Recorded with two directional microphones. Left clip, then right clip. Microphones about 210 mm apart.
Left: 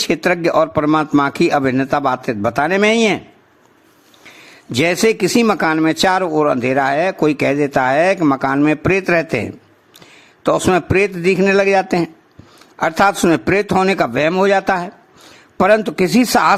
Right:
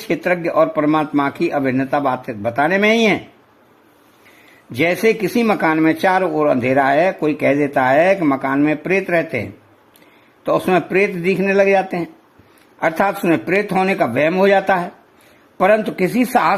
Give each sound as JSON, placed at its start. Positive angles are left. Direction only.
{"t": 0.1, "sound": "speech", "side_deg": 20}
{"t": 4.7, "sound": "speech", "side_deg": 20}